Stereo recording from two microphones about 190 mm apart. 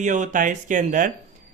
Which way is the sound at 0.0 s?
40° right (ahead or behind).